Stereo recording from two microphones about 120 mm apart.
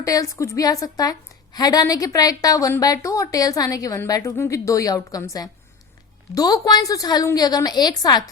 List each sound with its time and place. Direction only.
0.0 s a woman's voice: 30° left (ahead or behind)